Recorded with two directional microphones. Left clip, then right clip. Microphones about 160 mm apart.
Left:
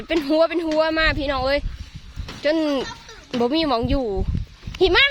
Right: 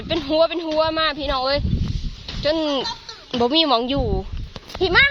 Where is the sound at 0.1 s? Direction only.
40° left (ahead or behind).